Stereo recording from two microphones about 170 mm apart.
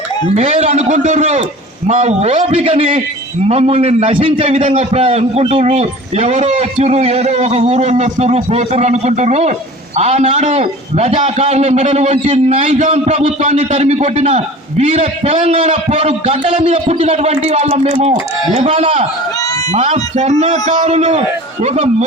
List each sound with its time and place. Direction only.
0.3 s a man's voice: 40° right (ahead or behind)